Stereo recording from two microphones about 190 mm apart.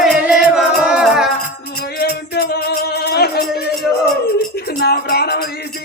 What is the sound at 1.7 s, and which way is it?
Music, 55° left (ahead or behind).